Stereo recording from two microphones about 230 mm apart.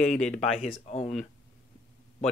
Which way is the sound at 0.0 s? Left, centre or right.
Centre.